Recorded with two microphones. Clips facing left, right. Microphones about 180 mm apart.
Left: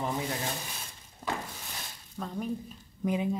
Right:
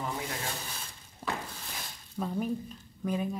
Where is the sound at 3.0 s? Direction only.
15° left (ahead or behind).